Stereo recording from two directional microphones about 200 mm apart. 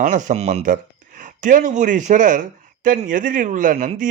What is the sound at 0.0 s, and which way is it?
Speech, 40° right (ahead or behind).